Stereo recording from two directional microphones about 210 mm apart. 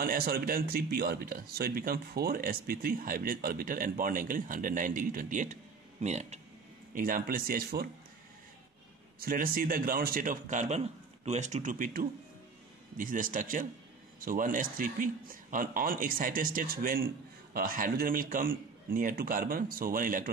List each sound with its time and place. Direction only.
0.0 s speech: 45° right (ahead or behind)
9.2 s a man's voice: 45° right (ahead or behind)